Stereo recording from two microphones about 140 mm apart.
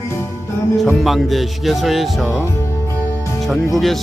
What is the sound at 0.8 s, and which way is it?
Speech, centre (ahead or behind).